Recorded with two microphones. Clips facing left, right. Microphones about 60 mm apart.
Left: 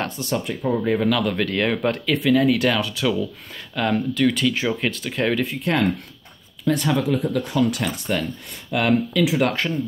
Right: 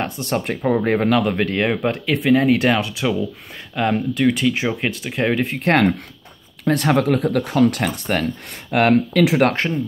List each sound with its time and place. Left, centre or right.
0.2 s speech: right
0.7 s speech: right
1.3 s speech: right
5.6 s speech: right
9.5 s speech: right